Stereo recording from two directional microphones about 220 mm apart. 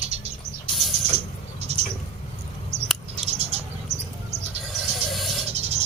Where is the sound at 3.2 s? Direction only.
30° right (ahead or behind).